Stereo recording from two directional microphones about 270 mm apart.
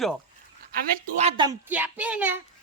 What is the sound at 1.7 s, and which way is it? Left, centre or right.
Speech, centre.